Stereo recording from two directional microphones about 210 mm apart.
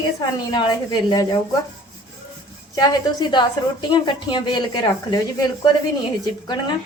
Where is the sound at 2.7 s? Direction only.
20° left (ahead or behind).